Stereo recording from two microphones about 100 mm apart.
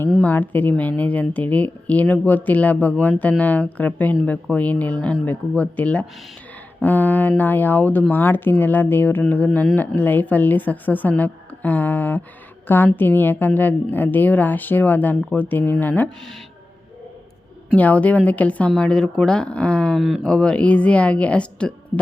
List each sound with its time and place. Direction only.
0.2 s a woman's voice: 15° left (ahead or behind)
17.7 s speech: 15° left (ahead or behind)